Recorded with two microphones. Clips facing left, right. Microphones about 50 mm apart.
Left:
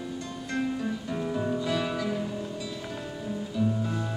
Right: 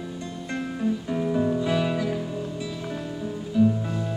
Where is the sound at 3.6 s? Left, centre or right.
Centre.